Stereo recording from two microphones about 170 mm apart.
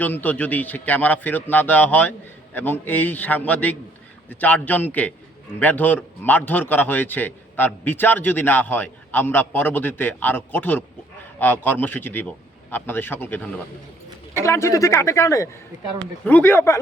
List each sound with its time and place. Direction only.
0.0 s a man's voice: 10° left (ahead or behind)